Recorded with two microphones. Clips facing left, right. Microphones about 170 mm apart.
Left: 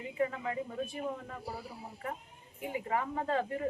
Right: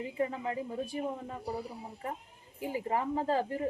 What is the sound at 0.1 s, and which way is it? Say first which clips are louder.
Speech: left 2 dB; 30° right (ahead or behind).